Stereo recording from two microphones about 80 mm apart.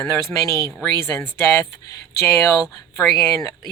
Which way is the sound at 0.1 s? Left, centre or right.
Left.